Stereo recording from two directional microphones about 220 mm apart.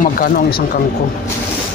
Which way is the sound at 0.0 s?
40° left (ahead or behind).